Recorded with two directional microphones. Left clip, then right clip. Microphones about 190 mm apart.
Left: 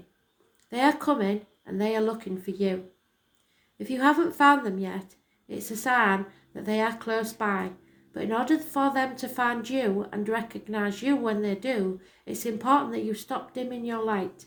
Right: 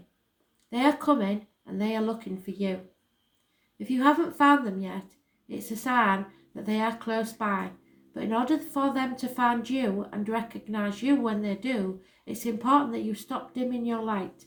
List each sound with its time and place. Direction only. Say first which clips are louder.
0.7 s speech: even; 40° left (ahead or behind)
3.8 s speech: left 1 dB; 35° left (ahead or behind)